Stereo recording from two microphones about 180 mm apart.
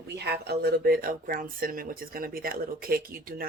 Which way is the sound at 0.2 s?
65° right (ahead or behind).